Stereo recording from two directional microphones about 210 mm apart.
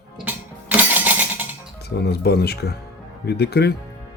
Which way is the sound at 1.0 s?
10° right (ahead or behind).